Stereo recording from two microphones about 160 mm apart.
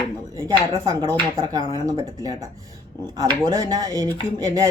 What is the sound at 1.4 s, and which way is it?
Speech, 25° right (ahead or behind).